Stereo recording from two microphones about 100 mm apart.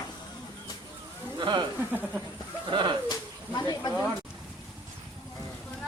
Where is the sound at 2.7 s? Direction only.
55° right (ahead or behind).